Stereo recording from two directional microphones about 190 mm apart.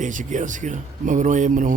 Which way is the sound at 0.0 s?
40° right (ahead or behind).